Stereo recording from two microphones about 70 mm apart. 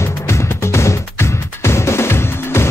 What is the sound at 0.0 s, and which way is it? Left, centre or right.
Music, left.